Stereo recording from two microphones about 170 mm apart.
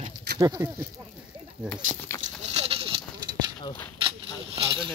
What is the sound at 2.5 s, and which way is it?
Clip-clop, 35° right (ahead or behind).